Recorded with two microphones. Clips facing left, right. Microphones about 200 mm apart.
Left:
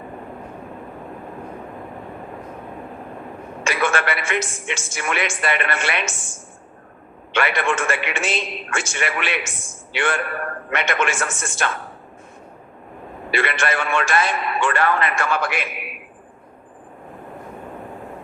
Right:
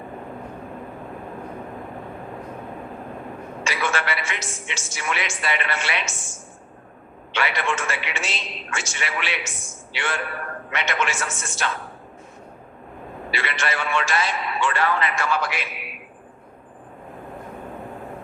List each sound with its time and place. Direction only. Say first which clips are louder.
3.6 s a woman's voice: left 5 dB; 55° left (ahead or behind)
7.3 s a woman's voice: left 4 dB; 55° left (ahead or behind)
13.3 s a woman's voice: left 6 dB; 55° left (ahead or behind)